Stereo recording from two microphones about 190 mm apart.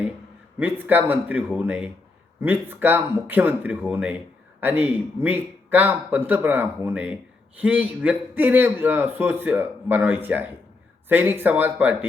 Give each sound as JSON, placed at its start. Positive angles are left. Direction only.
{"t": 0.6, "sound": "a man's voice", "side_deg": -10}